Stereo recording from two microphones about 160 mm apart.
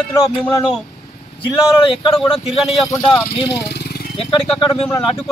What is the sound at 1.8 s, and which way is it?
Speech, 30° left (ahead or behind).